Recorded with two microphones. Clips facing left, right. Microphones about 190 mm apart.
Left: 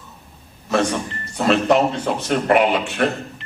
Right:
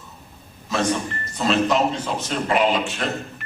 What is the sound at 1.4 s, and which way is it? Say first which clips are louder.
A man's voice: left 3 dB; 60° left (ahead or behind).